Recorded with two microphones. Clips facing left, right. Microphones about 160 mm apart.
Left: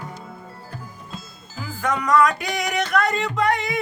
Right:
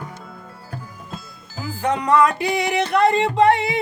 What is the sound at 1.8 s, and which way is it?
Music, 30° right (ahead or behind).